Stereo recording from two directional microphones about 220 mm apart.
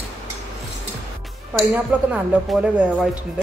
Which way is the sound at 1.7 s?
5° right (ahead or behind).